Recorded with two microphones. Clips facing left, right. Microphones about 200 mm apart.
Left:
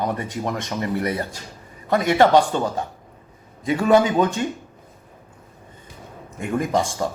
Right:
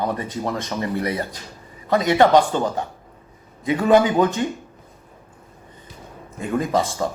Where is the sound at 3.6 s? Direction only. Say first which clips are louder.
Right 1 dB; 20° right (ahead or behind).